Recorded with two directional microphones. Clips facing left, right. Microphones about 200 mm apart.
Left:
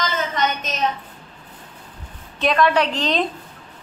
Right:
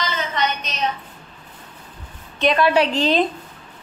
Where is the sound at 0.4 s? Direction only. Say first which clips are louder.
Even; 45° left (ahead or behind).